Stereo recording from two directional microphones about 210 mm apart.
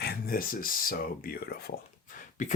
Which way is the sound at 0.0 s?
45° left (ahead or behind).